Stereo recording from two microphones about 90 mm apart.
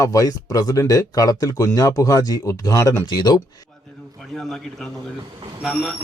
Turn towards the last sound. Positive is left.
turn(degrees=0)  # may be behind; listen again after turning